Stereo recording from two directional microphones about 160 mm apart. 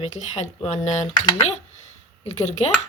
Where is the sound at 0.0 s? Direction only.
45° left (ahead or behind).